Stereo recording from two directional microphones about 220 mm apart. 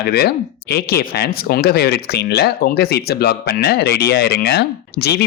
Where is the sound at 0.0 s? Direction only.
45° left (ahead or behind).